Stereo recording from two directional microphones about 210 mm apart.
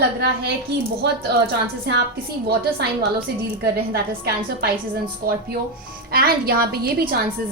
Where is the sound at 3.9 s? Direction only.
50° right (ahead or behind).